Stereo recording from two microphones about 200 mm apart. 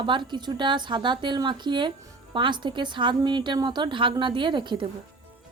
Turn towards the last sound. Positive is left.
turn(degrees=-25)  # may be behind; listen again after turning